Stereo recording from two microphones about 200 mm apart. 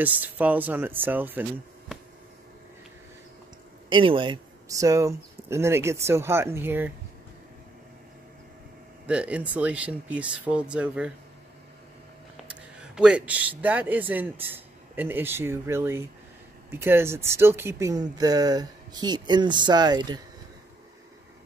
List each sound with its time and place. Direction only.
0.0 s speech: 10° right (ahead or behind)
3.9 s speech: 25° right (ahead or behind)
9.0 s speech: 5° right (ahead or behind)
12.8 s speech: 5° right (ahead or behind); by 20.2 s 20° right (ahead or behind)